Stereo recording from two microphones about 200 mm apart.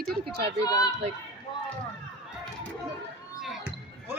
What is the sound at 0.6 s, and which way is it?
Speech, 15° left (ahead or behind).